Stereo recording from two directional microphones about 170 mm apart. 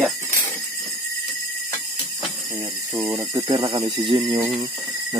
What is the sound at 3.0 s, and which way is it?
Speech, 25° right (ahead or behind).